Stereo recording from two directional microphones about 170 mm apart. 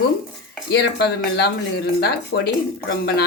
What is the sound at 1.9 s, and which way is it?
Speech, 65° left (ahead or behind).